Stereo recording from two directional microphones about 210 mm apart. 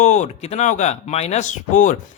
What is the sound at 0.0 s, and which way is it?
Speech, 35° left (ahead or behind).